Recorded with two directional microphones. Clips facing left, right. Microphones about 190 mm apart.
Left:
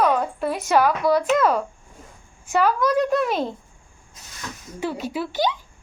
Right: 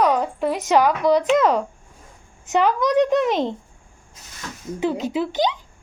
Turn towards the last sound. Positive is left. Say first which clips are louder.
# right 3 dB
turn(degrees=-20)  # may be behind; listen again after turning